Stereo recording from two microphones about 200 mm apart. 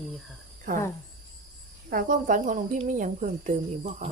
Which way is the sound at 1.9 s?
45° right (ahead or behind).